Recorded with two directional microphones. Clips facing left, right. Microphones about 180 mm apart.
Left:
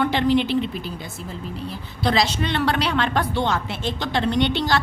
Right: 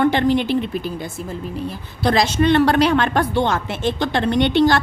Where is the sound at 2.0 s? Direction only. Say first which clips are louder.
Right 6 dB; 50° right (ahead or behind).